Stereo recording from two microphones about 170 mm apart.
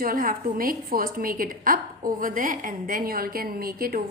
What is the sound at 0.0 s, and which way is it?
A woman's voice, 55° right (ahead or behind).